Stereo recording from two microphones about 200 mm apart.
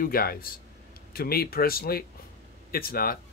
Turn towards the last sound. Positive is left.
turn(degrees=45)  # may be behind; listen again after turning